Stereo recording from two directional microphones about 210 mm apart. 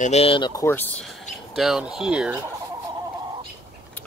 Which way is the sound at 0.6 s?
10° left (ahead or behind).